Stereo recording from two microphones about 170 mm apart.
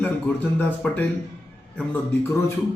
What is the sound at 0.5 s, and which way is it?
A man's voice, 10° left (ahead or behind).